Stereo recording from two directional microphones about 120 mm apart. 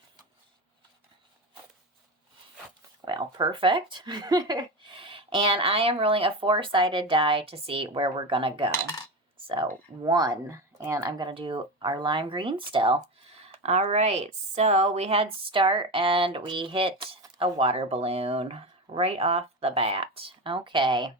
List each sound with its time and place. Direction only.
3.0 s speech: 40° right (ahead or behind)
10.0 s speech: 35° right (ahead or behind)